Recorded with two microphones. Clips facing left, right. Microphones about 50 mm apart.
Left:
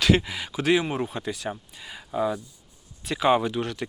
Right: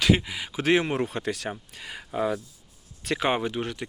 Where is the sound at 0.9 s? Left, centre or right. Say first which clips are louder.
Right 1 dB; right.